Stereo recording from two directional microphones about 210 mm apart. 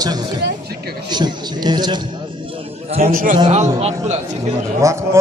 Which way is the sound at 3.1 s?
40° right (ahead or behind).